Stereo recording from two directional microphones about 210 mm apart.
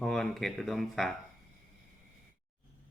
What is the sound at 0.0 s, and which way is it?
Speech, centre (ahead or behind).